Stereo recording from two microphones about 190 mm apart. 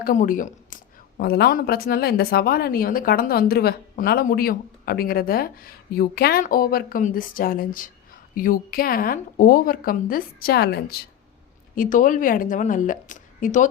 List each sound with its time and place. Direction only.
0.0 s a woman's voice: 45° left (ahead or behind)
11.7 s a woman's voice: 45° left (ahead or behind)